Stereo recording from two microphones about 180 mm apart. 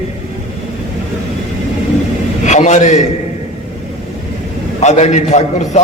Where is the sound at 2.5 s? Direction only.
40° left (ahead or behind).